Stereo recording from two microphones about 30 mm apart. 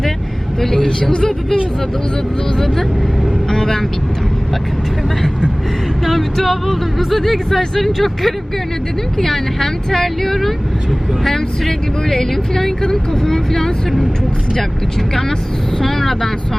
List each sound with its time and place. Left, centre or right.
3.5 s speech: left
6.1 s speech: centre
15.8 s speech: centre